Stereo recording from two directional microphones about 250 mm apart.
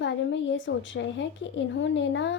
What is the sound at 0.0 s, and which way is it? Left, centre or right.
A woman's voice, left.